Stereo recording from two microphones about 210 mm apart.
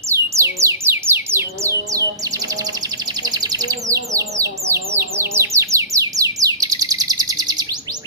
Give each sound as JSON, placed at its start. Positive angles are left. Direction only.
{"t": 0.1, "sound": "music", "side_deg": -15}
{"t": 3.3, "sound": "bird", "side_deg": -15}